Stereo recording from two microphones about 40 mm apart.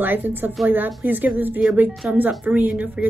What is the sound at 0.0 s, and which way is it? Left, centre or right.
A woman's voice, right.